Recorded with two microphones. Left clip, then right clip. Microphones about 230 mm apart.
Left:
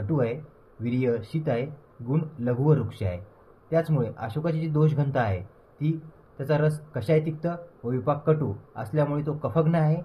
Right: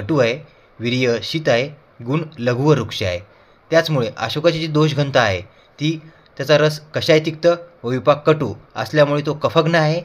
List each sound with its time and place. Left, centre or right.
0.1 s a man's voice: right